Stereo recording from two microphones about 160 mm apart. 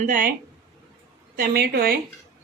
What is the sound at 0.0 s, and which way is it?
Speech, 60° right (ahead or behind).